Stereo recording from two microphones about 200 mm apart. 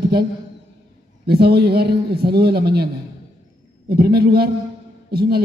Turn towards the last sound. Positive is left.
turn(degrees=-50)  # may be behind; listen again after turning